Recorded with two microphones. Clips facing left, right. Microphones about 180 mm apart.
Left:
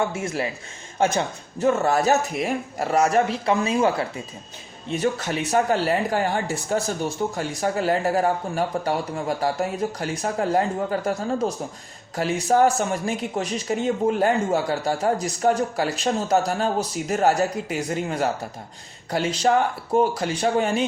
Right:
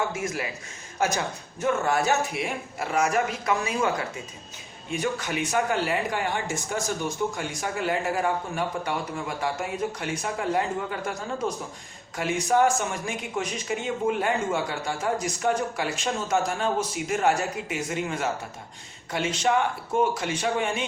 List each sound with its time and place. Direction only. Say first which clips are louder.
0.1 s speech: left 4 dB; 30° left (ahead or behind)
5.2 s speech: left 4 dB; 35° left (ahead or behind)